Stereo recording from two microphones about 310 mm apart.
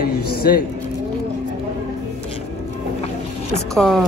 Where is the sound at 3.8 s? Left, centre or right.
Centre.